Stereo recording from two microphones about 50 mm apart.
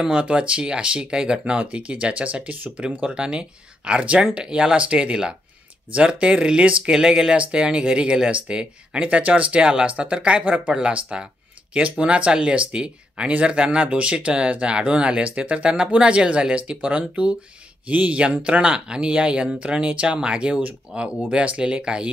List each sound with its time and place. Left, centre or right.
0.0 s speech: centre